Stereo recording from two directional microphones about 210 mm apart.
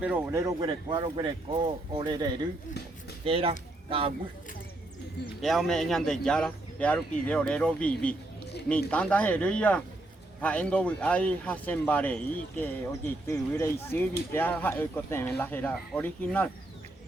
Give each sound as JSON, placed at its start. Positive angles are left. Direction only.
{"t": 0.0, "sound": "speech", "side_deg": -10}
{"t": 5.4, "sound": "speech", "side_deg": 0}